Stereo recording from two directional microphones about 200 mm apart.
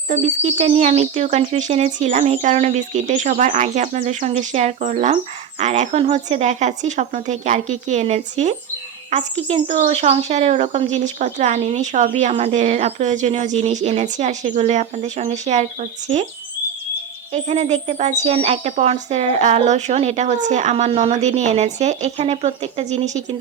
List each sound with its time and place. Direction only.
0.1 s speech: 35° right (ahead or behind)
17.3 s speech: 35° right (ahead or behind)